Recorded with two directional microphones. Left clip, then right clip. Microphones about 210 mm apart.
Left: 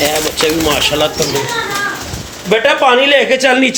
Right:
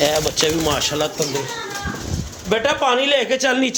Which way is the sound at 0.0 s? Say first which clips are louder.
Left 4 dB; 35° right (ahead or behind).